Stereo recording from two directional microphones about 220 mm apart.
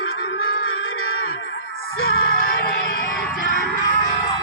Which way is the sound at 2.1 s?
40° left (ahead or behind).